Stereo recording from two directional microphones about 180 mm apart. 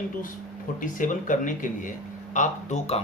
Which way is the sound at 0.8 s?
45° left (ahead or behind).